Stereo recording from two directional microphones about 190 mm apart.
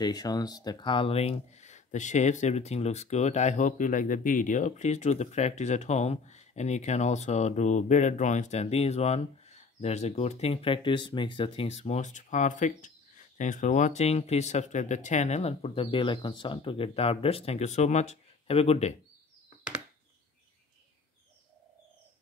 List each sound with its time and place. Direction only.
0.0 s speech: 20° left (ahead or behind)